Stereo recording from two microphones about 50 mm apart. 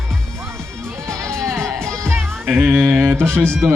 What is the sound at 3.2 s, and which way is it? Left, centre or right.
Speech, right.